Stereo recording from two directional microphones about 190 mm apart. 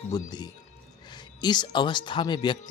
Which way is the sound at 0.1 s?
20° left (ahead or behind).